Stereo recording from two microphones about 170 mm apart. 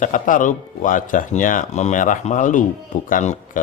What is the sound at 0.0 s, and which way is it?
Speech, 50° left (ahead or behind).